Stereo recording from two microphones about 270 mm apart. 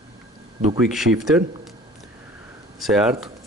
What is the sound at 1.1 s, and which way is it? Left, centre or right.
Speech, centre.